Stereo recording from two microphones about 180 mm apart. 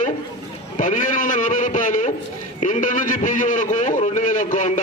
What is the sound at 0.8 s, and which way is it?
A man's voice, 50° left (ahead or behind).